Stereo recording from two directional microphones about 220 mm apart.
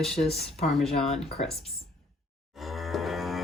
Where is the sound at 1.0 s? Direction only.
30° left (ahead or behind).